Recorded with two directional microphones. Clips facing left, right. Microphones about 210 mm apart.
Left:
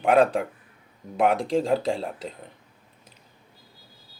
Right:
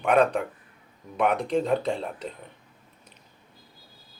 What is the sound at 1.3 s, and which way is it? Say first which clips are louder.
Speech: left 2 dB; 90° left.